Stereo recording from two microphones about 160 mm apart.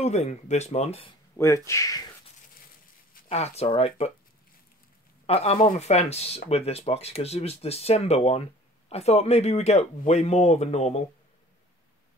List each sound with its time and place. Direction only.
0.0 s speech: 45° left (ahead or behind)
1.3 s speech: 15° left (ahead or behind)
3.3 s speech: 40° left (ahead or behind)
5.2 s speech: 40° left (ahead or behind)